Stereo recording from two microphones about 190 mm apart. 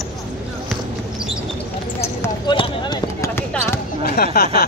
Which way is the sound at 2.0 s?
15° left (ahead or behind).